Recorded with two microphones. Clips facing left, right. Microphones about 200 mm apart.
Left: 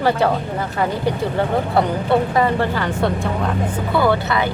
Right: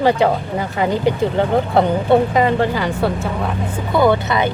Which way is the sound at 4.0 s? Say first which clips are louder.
Right 3 dB; 20° right (ahead or behind).